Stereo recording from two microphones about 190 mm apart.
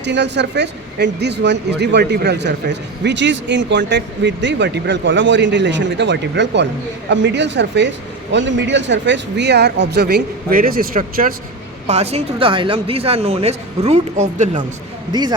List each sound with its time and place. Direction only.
0.0 s speech: 65° right (ahead or behind); by 11.3 s 50° right (ahead or behind)
11.9 s a woman's voice: 35° right (ahead or behind)
15.1 s speech: 20° right (ahead or behind)